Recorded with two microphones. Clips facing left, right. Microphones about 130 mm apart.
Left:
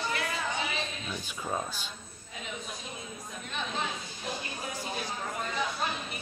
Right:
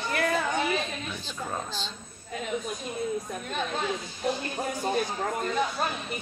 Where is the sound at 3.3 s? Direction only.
50° right (ahead or behind).